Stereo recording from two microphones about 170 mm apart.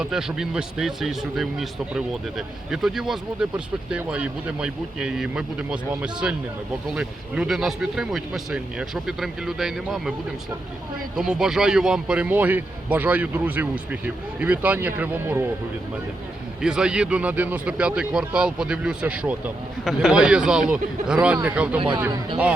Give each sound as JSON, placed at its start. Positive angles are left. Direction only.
{"t": 0.0, "sound": "speech", "side_deg": -5}
{"t": 11.2, "sound": "a man's voice", "side_deg": -5}
{"t": 16.6, "sound": "a man's voice", "side_deg": -5}
{"t": 21.8, "sound": "speech", "side_deg": -30}